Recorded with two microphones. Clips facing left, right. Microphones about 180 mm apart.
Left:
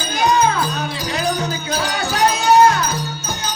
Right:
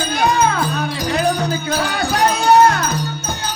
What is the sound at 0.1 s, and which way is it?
Music, 60° right (ahead or behind).